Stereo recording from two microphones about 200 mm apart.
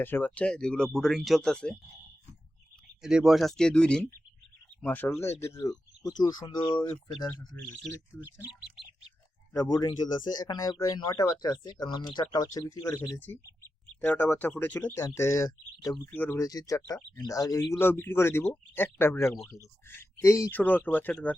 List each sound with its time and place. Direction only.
0.0 s speech: 10° left (ahead or behind)
3.0 s speech: 5° right (ahead or behind); by 7.3 s 20° left (ahead or behind)
9.5 s speech: 15° left (ahead or behind)